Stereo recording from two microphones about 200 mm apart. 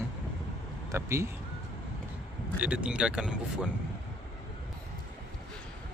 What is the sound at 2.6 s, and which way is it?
Speech, 5° right (ahead or behind).